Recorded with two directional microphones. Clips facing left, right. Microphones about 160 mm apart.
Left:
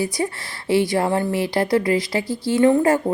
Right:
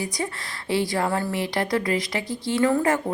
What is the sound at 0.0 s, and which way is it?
A woman's voice, 25° left (ahead or behind).